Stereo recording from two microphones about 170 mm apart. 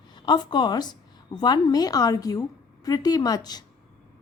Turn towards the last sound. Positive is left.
turn(degrees=25)  # may be behind; listen again after turning